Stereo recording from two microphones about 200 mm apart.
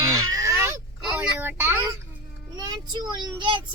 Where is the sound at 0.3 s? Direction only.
15° right (ahead or behind).